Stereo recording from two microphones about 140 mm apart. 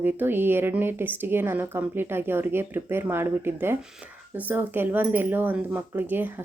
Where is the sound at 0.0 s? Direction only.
15° right (ahead or behind).